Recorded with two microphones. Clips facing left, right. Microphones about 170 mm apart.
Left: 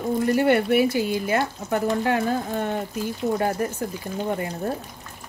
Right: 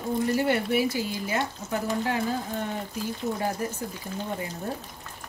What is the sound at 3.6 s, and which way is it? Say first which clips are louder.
Speech: left 5 dB; 60° left (ahead or behind).